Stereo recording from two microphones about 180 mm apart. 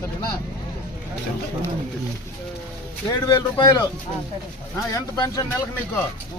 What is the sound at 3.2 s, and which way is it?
Speech, 20° left (ahead or behind).